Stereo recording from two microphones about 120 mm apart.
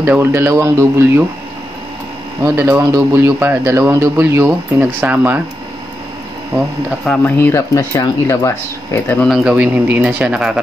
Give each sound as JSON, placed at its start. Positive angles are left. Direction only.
{"t": 0.0, "sound": "speech", "side_deg": -20}
{"t": 2.4, "sound": "speech", "side_deg": -20}
{"t": 7.1, "sound": "speech", "side_deg": 15}
{"t": 9.2, "sound": "speech", "side_deg": -5}